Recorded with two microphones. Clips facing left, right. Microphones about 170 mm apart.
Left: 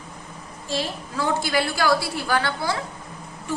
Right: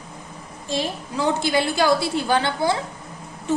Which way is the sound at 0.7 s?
20° right (ahead or behind).